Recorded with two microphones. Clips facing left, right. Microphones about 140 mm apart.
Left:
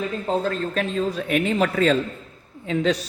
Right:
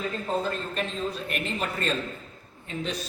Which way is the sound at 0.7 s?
90° left.